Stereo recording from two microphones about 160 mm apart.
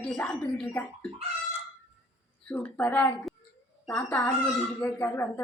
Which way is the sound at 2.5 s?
10° left (ahead or behind).